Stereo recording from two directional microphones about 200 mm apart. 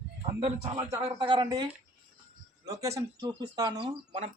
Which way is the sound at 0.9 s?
20° right (ahead or behind).